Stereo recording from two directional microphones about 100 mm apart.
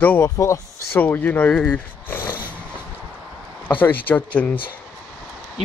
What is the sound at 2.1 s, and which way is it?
Dog, 20° left (ahead or behind).